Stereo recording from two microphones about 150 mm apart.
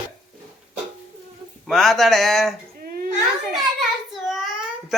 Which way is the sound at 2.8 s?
75° right (ahead or behind).